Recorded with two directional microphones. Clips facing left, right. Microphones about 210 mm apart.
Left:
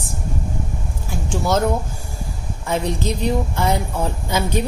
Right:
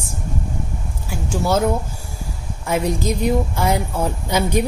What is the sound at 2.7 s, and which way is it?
A woman's voice, 10° right (ahead or behind).